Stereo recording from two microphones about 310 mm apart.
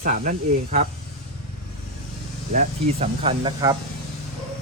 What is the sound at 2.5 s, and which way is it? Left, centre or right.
Speech, right.